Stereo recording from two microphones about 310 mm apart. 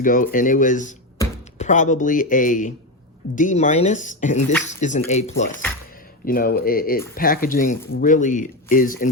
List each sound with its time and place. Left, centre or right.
0.0 s speech: left